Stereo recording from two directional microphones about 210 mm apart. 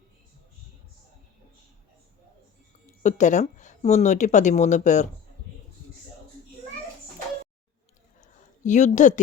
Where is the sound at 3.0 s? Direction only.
35° left (ahead or behind).